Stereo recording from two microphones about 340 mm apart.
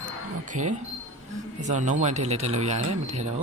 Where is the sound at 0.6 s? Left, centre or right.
Right.